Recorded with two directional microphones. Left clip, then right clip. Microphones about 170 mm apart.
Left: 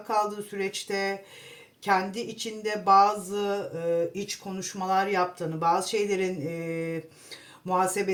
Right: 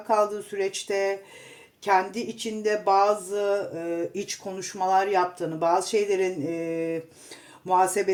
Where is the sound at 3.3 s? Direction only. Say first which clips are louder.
Right 4 dB; 40° right (ahead or behind).